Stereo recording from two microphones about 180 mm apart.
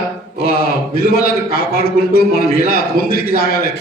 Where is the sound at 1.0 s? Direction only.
55° left (ahead or behind).